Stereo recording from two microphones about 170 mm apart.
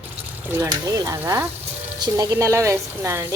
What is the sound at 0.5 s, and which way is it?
Speech, 20° right (ahead or behind).